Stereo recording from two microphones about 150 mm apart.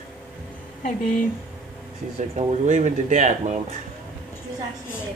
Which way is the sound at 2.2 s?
50° right (ahead or behind).